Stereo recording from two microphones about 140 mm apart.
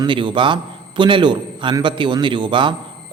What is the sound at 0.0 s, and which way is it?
A man's voice, 35° right (ahead or behind).